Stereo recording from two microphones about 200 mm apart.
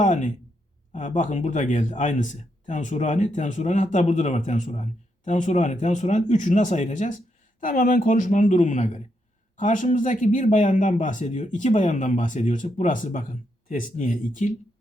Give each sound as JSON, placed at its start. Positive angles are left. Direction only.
{"t": 0.0, "sound": "speech", "side_deg": 40}